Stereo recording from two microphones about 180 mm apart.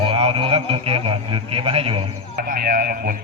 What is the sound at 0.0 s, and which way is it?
A man's voice, 35° right (ahead or behind).